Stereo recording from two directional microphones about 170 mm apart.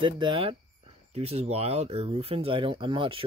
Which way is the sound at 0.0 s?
30° right (ahead or behind).